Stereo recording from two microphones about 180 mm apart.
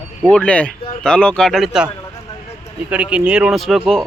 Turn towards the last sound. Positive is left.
turn(degrees=0)  # may be behind; listen again after turning